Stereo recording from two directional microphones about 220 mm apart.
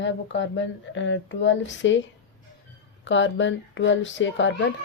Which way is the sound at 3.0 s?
55° left (ahead or behind).